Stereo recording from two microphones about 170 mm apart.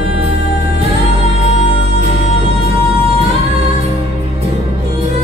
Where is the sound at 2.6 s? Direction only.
35° right (ahead or behind).